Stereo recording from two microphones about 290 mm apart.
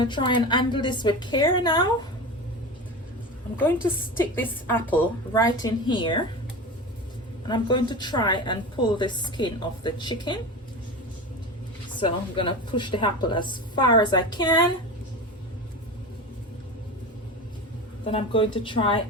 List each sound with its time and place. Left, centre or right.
0.0 s a woman's voice: centre
4.4 s a woman's voice: centre
7.4 s a woman's voice: centre
11.9 s a woman's voice: centre
18.1 s a woman's voice: centre